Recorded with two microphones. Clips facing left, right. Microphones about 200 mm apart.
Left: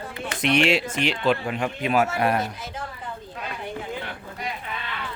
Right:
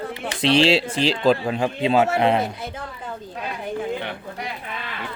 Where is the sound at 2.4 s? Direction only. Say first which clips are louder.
Right 3 dB; 60° right (ahead or behind).